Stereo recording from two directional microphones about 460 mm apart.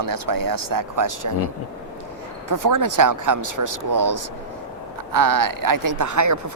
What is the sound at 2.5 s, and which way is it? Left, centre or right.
Speech, right.